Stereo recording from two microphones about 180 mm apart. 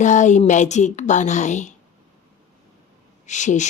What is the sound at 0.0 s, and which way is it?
Speech, 40° left (ahead or behind).